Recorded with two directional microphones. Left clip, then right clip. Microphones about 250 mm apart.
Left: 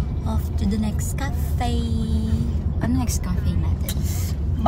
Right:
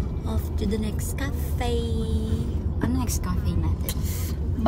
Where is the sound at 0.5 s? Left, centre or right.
Left.